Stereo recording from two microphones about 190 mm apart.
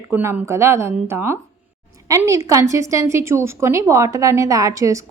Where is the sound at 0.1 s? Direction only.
15° right (ahead or behind).